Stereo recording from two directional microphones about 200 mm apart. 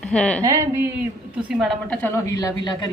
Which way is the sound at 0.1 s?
5° left (ahead or behind).